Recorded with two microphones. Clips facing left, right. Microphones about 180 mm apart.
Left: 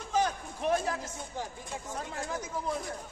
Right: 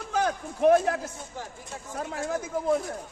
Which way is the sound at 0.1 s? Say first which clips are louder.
Right 2 dB; 65° right (ahead or behind).